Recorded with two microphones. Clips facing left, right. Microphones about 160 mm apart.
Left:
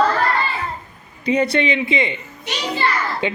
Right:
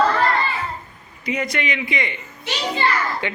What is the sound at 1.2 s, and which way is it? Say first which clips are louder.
A child's voice: left 7 dB; 30° left (ahead or behind).